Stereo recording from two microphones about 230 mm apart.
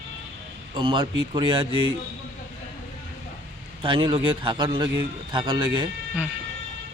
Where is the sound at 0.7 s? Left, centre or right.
Right.